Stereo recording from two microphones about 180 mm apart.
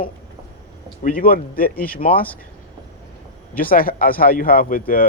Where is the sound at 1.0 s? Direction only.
50° left (ahead or behind).